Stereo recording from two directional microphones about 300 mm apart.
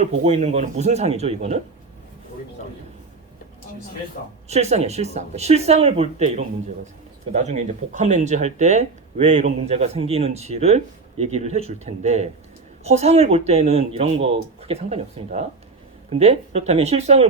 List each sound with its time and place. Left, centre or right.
0.0 s speech: right
4.4 s speech: right